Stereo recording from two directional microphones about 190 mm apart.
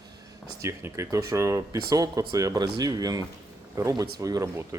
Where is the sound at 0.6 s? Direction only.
15° right (ahead or behind).